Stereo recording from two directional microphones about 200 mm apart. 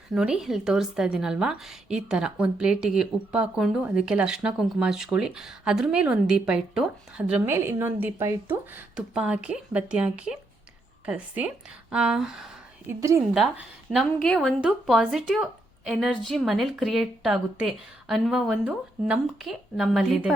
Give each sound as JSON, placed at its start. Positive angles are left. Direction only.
{"t": 0.1, "sound": "a woman's voice", "side_deg": -5}
{"t": 13.0, "sound": "a woman's voice", "side_deg": -15}
{"t": 13.3, "sound": "a woman's voice", "side_deg": 0}